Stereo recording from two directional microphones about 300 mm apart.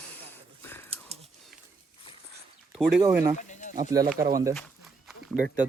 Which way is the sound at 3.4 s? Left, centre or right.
Left.